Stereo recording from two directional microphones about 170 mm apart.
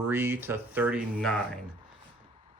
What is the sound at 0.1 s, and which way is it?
Speech, 15° right (ahead or behind).